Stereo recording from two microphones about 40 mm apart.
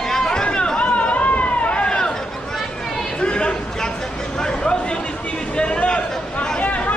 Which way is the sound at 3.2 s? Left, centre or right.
Left.